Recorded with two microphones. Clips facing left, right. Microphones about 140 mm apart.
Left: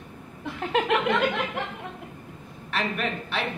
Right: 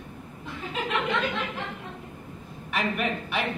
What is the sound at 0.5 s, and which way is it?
Chuckle, 65° left (ahead or behind).